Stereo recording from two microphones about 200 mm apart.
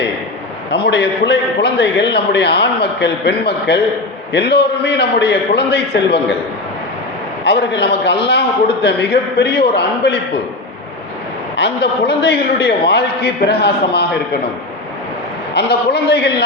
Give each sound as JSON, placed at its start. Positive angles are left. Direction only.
{"t": 0.7, "sound": "a man's voice", "side_deg": 60}
{"t": 7.4, "sound": "a man's voice", "side_deg": 60}
{"t": 11.5, "sound": "a man's voice", "side_deg": 60}
{"t": 15.5, "sound": "a man's voice", "side_deg": 55}